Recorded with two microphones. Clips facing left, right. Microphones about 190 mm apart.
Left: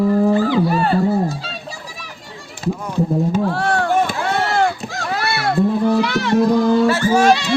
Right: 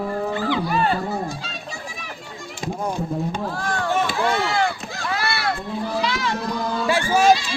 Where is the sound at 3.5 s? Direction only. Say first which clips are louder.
Left 7 dB; 65° left (ahead or behind).